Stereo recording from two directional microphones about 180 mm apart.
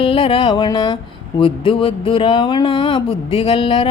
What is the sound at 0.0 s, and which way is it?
Speech, 30° left (ahead or behind).